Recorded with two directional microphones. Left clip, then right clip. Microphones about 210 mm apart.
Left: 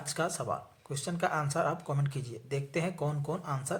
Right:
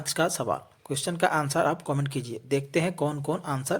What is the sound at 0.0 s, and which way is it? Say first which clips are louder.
Speech: right 7 dB; 35° right (ahead or behind).